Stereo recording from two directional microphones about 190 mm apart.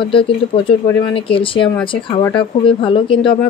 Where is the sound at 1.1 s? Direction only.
30° left (ahead or behind).